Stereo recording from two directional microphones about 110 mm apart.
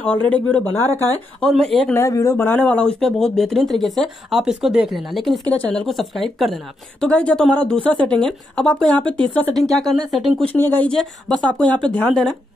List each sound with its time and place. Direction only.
0.0 s a woman's voice: 10° left (ahead or behind)
1.4 s speech: 5° left (ahead or behind)
2.0 s speech: 30° left (ahead or behind)
2.3 s a woman's voice: 15° left (ahead or behind)
9.8 s speech: centre (ahead or behind)
10.4 s a woman's voice: 15° left (ahead or behind)
10.9 s a woman's voice: 5° left (ahead or behind)